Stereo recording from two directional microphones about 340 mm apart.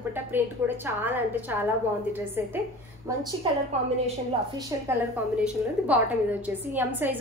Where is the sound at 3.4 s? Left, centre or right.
Centre.